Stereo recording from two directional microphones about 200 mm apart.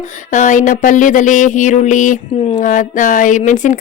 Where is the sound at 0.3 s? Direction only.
40° left (ahead or behind).